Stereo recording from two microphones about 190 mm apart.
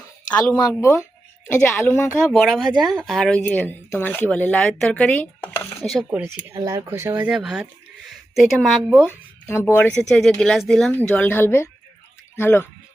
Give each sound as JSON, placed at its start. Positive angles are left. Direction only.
{"t": 0.5, "sound": "speech", "side_deg": 15}
{"t": 5.8, "sound": "speech", "side_deg": 0}
{"t": 6.5, "sound": "speech", "side_deg": -20}
{"t": 7.3, "sound": "speech", "side_deg": -5}
{"t": 9.0, "sound": "speech", "side_deg": 15}